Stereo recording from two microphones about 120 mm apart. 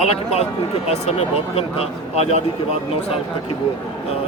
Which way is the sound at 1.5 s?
55° left (ahead or behind).